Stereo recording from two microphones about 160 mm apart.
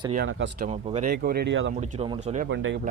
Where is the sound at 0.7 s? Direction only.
40° right (ahead or behind).